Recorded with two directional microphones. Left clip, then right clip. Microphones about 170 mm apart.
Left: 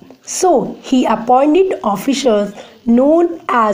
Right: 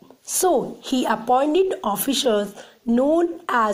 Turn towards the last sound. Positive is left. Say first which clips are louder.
# left 7 dB
turn(degrees=-25)  # may be behind; listen again after turning